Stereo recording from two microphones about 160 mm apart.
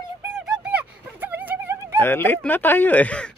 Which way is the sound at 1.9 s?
15° left (ahead or behind).